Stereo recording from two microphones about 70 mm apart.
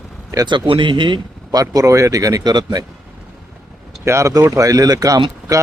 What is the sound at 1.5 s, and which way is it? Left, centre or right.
Speech, right.